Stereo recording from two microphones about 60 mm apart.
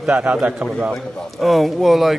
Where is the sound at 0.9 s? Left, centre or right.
Centre.